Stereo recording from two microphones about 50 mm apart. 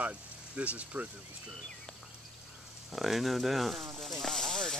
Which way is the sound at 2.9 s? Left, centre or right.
Centre.